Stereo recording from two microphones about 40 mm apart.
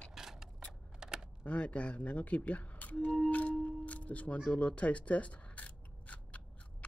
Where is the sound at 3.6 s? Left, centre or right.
Left.